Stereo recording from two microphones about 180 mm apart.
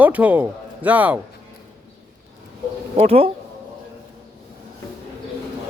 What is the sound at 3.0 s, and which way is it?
Speech, 35° right (ahead or behind).